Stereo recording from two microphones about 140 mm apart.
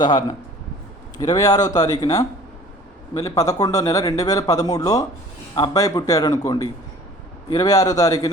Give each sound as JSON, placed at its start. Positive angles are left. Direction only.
{"t": 0.0, "sound": "speech", "side_deg": 30}